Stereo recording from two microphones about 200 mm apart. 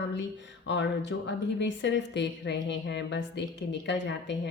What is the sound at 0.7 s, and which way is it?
A woman's voice, 65° left (ahead or behind).